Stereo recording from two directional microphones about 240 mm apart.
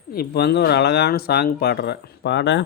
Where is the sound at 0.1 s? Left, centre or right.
Left.